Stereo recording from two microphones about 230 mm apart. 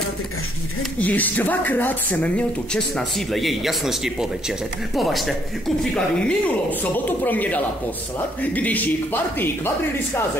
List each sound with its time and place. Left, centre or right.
0.9 s a man's voice: centre